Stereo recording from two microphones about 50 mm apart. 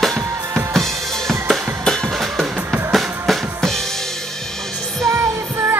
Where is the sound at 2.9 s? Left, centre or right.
Centre.